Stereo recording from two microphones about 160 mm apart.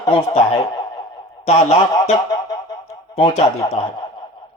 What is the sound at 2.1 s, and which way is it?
Music, 25° left (ahead or behind).